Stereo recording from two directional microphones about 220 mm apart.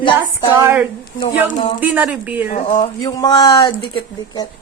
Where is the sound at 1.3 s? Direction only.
35° left (ahead or behind).